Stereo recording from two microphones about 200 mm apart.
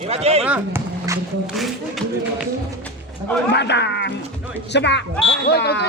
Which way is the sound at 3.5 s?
60° left (ahead or behind).